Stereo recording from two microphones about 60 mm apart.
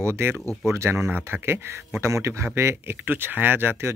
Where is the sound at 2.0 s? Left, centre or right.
Right.